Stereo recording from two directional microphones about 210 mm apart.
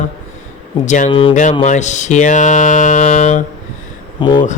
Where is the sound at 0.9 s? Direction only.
35° left (ahead or behind).